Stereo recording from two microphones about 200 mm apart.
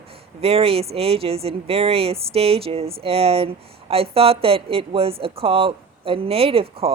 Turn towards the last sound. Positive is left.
turn(degrees=-30)  # may be behind; listen again after turning